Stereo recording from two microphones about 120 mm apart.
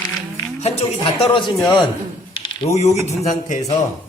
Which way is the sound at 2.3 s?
40° left (ahead or behind).